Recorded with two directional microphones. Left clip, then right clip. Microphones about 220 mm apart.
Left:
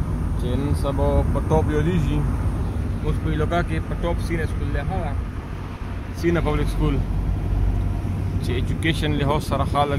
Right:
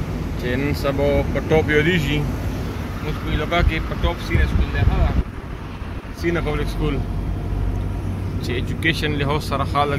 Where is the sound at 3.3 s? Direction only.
25° left (ahead or behind).